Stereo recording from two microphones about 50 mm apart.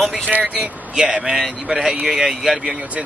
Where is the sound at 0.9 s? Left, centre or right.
Centre.